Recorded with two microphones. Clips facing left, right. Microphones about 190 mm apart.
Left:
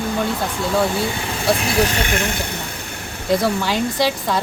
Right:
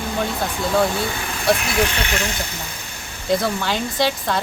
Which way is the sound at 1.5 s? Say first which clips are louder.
Left 1 dB; 30° left (ahead or behind).